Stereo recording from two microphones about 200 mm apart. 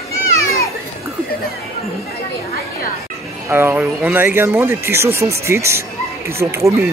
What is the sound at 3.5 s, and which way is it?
Speech, 10° right (ahead or behind).